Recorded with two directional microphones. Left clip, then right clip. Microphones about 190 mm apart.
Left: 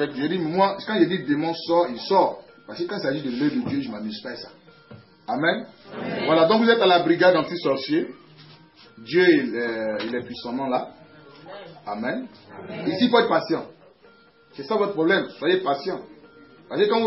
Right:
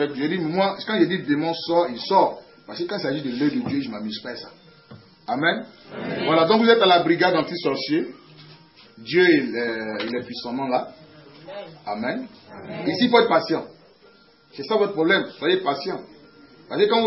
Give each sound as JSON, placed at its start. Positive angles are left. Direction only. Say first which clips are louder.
{"t": 0.0, "sound": "a man's voice", "louder": "right 1 dB", "side_deg": 0}
{"t": 9.0, "sound": "a man's voice", "louder": "right 1 dB", "side_deg": 0}
{"t": 11.8, "sound": "a man's voice", "louder": "right 1 dB", "side_deg": 0}